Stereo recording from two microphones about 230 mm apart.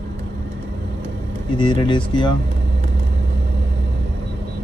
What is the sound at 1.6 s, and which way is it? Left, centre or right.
Speech, centre.